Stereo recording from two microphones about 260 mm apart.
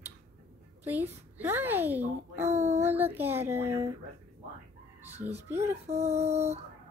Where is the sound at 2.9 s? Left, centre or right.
Centre.